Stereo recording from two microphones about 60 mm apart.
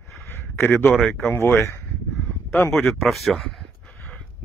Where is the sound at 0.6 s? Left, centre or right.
Left.